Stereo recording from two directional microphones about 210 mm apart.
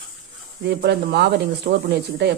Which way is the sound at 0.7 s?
50° right (ahead or behind).